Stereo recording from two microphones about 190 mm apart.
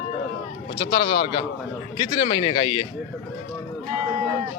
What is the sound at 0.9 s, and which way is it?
Speech, 25° left (ahead or behind).